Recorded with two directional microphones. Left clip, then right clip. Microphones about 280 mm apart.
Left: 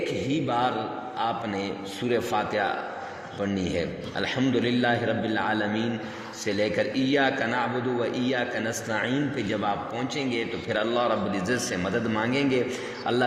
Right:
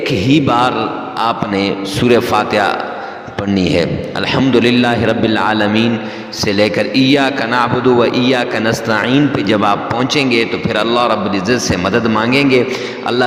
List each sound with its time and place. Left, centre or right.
0.3 s a man's voice: right